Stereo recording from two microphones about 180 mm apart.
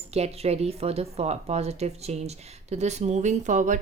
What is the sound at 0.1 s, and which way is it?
Speech, 35° right (ahead or behind).